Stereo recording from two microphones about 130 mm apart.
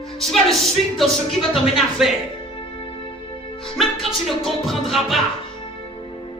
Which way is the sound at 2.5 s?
40° left (ahead or behind).